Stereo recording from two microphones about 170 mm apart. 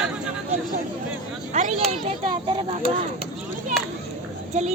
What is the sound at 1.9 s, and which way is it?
A child's voice, 35° right (ahead or behind).